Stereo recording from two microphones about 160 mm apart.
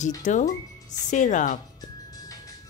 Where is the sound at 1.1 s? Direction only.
50° left (ahead or behind).